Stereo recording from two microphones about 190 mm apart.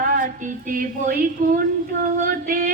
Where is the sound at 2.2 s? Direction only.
50° right (ahead or behind).